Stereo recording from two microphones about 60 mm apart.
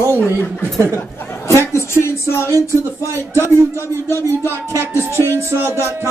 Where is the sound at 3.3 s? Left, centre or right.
Right.